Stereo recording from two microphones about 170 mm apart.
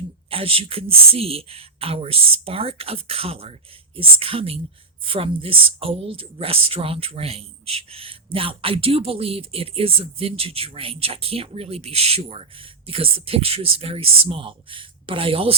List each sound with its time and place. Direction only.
0.3 s speech: 35° right (ahead or behind)